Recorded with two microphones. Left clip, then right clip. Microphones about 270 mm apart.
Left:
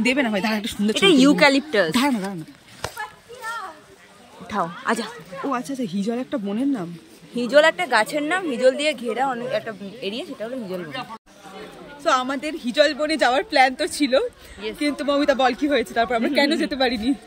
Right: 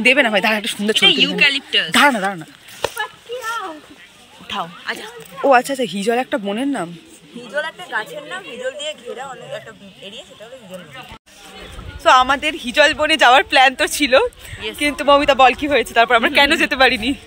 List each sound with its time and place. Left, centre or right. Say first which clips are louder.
0.0 s speech: right 8 dB; centre
0.9 s speech: right 2 dB; left
1.9 s speech: right 9 dB; centre
4.5 s speech: left 1 dB; left
5.5 s speech: right 14 dB; centre
7.4 s speech: left 9 dB; left
12.0 s speech: right 9 dB; centre